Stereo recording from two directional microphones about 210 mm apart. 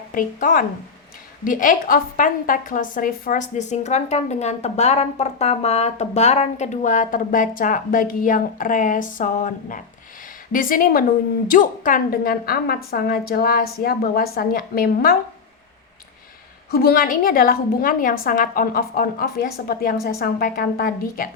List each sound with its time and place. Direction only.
0.1 s a woman's voice: 40° left (ahead or behind)
16.7 s a woman's voice: 45° left (ahead or behind)